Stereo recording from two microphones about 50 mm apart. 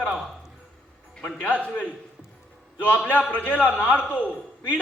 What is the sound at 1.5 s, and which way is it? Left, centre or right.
Speech, left.